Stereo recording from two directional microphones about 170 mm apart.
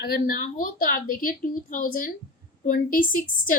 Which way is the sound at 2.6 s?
55° left (ahead or behind).